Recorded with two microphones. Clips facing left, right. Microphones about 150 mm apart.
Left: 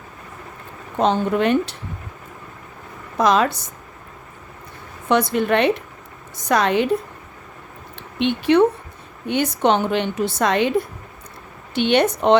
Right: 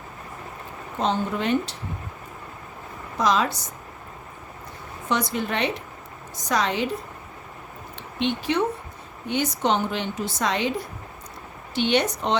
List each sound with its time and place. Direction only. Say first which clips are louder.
0.9 s a woman's voice: left 6 dB; 60° left (ahead or behind)
3.2 s a woman's voice: left 5 dB; 60° left (ahead or behind)
5.0 s a woman's voice: left 7 dB; 60° left (ahead or behind)
8.2 s a woman's voice: left 8 dB; 60° left (ahead or behind)